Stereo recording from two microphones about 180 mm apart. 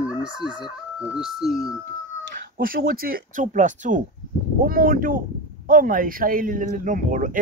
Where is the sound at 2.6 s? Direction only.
55° right (ahead or behind).